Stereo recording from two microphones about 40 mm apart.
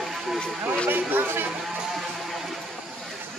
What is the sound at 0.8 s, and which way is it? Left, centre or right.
Speech, right.